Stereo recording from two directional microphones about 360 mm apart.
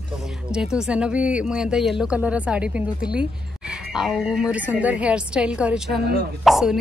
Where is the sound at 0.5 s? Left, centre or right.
Centre.